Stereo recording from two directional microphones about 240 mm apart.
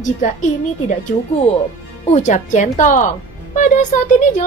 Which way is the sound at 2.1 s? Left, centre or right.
Left.